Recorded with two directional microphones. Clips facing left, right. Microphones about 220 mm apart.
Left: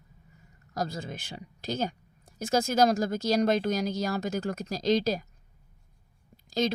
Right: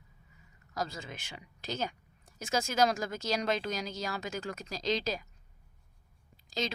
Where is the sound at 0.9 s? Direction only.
35° left (ahead or behind).